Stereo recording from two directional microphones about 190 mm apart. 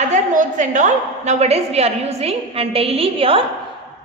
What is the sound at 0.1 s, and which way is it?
A woman's voice, 40° right (ahead or behind).